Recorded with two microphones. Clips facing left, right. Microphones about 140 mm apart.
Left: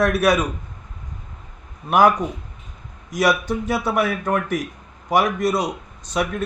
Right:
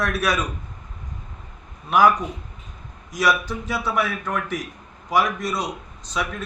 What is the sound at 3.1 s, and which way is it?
A man's voice, 60° left (ahead or behind).